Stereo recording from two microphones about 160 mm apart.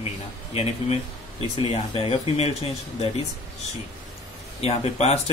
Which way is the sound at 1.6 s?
35° left (ahead or behind).